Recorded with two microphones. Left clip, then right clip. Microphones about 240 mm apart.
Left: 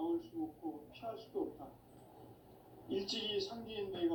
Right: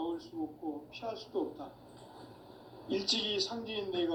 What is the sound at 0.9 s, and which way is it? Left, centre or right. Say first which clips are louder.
Speech: right 5 dB; right.